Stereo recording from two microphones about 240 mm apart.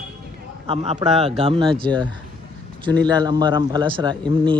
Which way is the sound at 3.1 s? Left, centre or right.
Centre.